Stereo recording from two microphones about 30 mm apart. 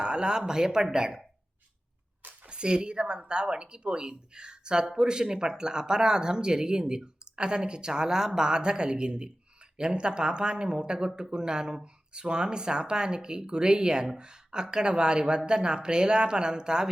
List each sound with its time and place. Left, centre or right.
0.0 s speech: right
2.5 s speech: right